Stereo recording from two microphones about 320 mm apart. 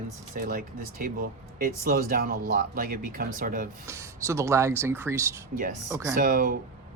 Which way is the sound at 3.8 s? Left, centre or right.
Centre.